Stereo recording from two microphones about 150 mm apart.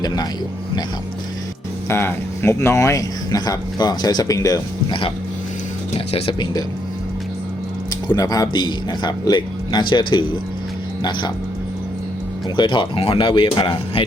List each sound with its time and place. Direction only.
1.9 s speech: 15° left (ahead or behind); by 6.3 s 40° left (ahead or behind)
6.4 s speech: 25° left (ahead or behind)
8.0 s speech: 25° left (ahead or behind)
12.5 s speech: 30° left (ahead or behind)